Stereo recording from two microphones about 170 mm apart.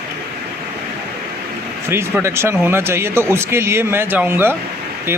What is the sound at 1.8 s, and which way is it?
A man's voice, 15° right (ahead or behind).